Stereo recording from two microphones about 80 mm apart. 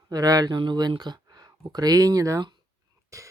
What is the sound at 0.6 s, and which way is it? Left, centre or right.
Speech, right.